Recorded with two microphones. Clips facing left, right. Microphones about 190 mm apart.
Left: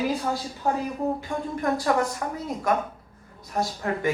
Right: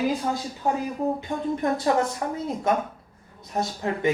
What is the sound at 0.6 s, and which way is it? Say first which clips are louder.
A man's voice: right 1 dB; 15° right (ahead or behind).